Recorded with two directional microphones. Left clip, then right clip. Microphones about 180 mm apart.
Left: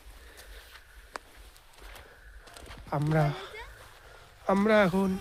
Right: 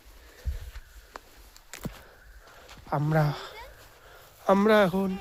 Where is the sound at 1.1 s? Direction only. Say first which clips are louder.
Left 3 dB; 75° left (ahead or behind).